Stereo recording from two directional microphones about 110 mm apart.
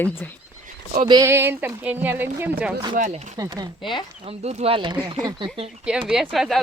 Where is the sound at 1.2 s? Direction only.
20° right (ahead or behind).